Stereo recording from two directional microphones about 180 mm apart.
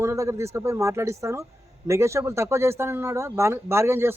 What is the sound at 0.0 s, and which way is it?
Speech, 15° right (ahead or behind).